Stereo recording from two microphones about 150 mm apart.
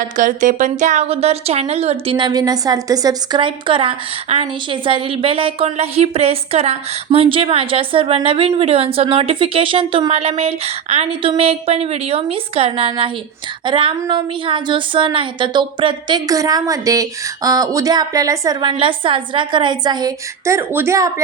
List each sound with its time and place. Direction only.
0.2 s a woman's voice: 60° right (ahead or behind); by 21.1 s 20° right (ahead or behind)